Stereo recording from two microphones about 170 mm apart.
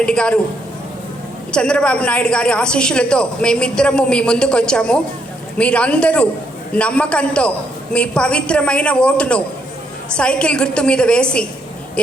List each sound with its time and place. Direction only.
0.0 s a woman's voice: 5° left (ahead or behind)
1.5 s a woman's voice: 5° left (ahead or behind)